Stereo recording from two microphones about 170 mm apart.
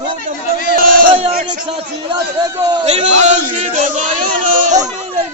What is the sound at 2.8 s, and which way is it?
A man's voice, 40° right (ahead or behind).